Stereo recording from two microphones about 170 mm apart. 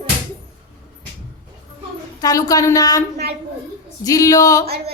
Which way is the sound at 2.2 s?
20° left (ahead or behind).